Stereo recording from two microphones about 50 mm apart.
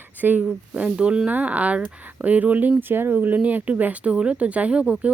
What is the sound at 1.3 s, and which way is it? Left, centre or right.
Speech, right.